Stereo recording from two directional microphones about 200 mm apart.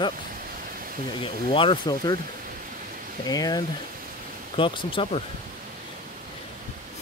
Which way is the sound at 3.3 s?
20° left (ahead or behind).